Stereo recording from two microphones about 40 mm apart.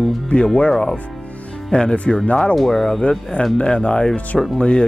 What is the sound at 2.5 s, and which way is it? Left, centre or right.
Speech, centre.